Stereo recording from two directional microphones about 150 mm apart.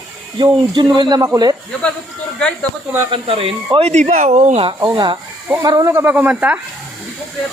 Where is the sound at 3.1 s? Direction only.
40° right (ahead or behind); by 6.6 s 10° right (ahead or behind).